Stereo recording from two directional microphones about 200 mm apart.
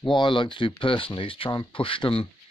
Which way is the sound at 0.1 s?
25° left (ahead or behind).